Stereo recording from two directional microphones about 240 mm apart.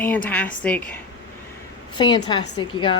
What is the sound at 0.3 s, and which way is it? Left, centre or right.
Speech, centre.